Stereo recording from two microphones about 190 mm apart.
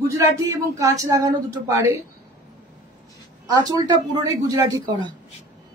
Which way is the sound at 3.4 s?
20° right (ahead or behind).